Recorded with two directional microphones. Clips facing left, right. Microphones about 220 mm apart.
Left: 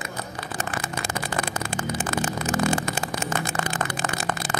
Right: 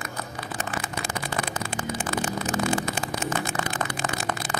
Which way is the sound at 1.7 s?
45° left (ahead or behind).